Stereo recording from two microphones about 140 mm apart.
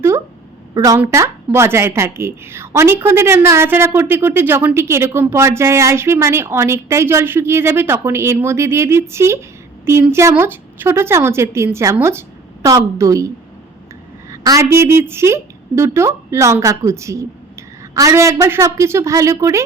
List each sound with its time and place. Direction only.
0.7 s a woman's voice: 25° right (ahead or behind)